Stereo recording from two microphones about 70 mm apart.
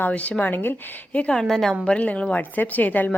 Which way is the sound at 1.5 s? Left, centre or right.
Centre.